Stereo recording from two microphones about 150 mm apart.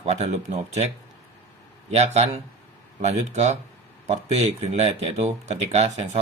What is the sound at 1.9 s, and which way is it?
Speech, 45° right (ahead or behind).